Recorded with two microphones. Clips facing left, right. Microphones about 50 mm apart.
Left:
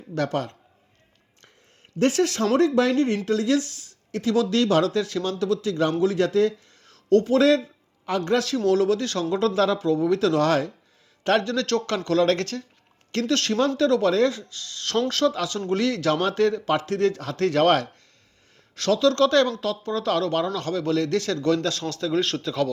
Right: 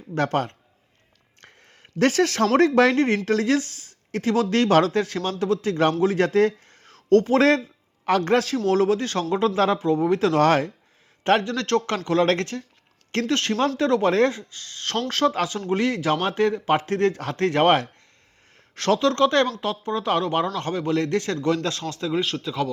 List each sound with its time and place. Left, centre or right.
0.2 s speech: right
2.0 s speech: right
2.4 s speech: right
8.0 s speech: right
8.4 s speech: right
13.1 s speech: right
22.2 s speech: centre